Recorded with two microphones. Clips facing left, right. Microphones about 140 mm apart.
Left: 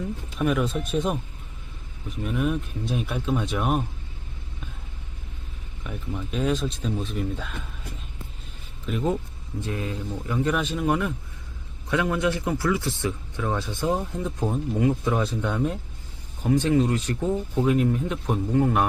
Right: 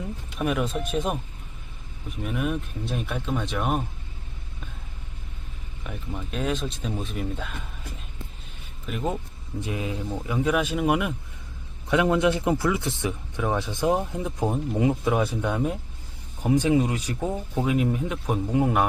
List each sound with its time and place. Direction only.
0.3 s speech: 5° right (ahead or behind)
2.2 s speech: centre (ahead or behind)
6.3 s speech: centre (ahead or behind)
8.9 s speech: 5° right (ahead or behind)
9.6 s speech: 15° right (ahead or behind)